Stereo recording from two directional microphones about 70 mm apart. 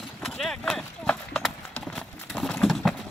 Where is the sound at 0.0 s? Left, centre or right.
Centre.